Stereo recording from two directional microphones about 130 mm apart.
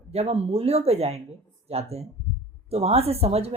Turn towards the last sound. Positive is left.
turn(degrees=-50)  # may be behind; listen again after turning